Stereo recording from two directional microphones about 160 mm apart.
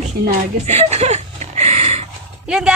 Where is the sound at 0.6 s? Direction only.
45° right (ahead or behind).